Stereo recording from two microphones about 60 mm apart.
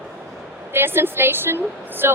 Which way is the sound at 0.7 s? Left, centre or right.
Right.